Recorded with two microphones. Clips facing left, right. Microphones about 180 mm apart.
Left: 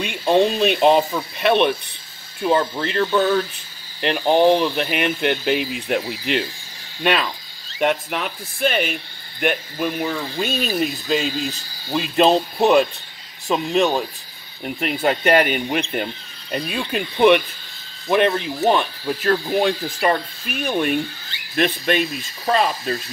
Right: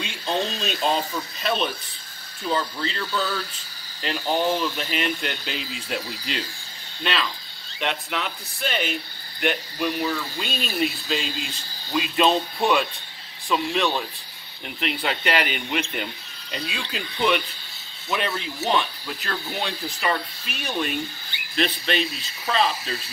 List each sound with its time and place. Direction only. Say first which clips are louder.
0.0 s speech: left 10 dB; 60° left (ahead or behind)
4.0 s speech: left 8 dB; 55° left (ahead or behind)
13.5 s speech: left 5 dB; 45° left (ahead or behind)